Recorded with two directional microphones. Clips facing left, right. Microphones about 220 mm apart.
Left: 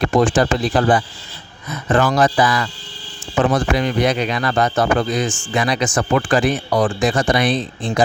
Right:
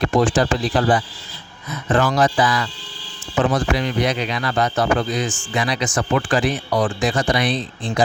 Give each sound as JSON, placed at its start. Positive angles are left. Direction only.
{"t": 0.2, "sound": "speech", "side_deg": 55}